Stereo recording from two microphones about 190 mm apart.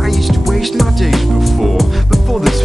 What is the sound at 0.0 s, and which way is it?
Music, centre (ahead or behind).